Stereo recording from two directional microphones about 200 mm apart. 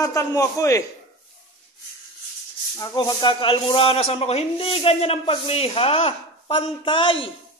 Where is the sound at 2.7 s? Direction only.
20° left (ahead or behind).